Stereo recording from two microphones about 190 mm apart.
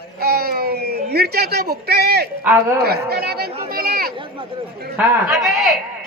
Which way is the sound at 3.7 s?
50° right (ahead or behind).